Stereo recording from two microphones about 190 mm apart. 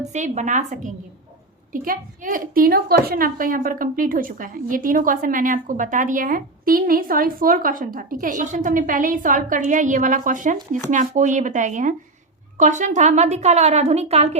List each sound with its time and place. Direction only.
0.1 s a woman's voice: 40° right (ahead or behind)